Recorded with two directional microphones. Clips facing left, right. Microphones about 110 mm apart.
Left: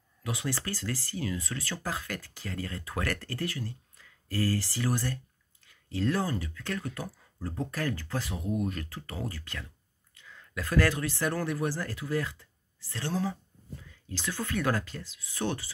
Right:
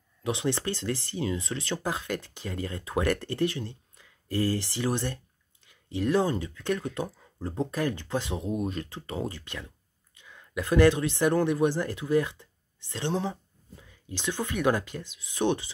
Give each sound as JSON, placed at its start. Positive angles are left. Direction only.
{"t": 0.2, "sound": "speech", "side_deg": -25}